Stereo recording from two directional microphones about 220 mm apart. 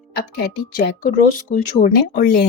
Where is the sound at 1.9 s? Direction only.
45° left (ahead or behind).